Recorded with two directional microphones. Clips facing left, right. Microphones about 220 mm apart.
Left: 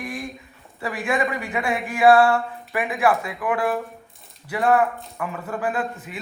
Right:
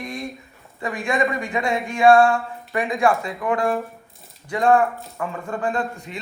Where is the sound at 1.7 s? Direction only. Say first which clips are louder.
Right 1 dB; 5° left (ahead or behind).